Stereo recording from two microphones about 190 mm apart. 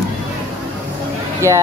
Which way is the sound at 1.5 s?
15° right (ahead or behind).